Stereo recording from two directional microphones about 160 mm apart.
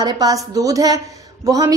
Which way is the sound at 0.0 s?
25° right (ahead or behind).